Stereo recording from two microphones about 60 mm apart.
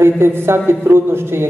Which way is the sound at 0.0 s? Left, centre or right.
Right.